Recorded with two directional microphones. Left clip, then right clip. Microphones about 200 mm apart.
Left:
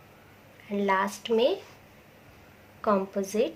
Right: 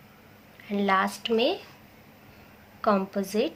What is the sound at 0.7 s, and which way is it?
Speech, 20° right (ahead or behind).